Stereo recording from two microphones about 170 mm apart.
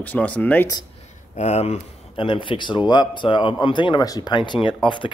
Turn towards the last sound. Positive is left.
turn(degrees=30)  # may be behind; listen again after turning